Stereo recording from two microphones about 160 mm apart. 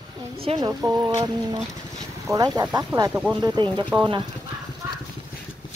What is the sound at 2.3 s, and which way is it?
Speech, 25° right (ahead or behind).